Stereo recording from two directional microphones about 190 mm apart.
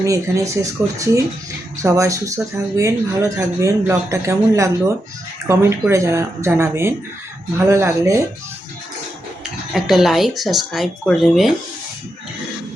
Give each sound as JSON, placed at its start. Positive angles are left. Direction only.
{"t": 0.0, "sound": "speech", "side_deg": -15}
{"t": 9.7, "sound": "speech", "side_deg": 0}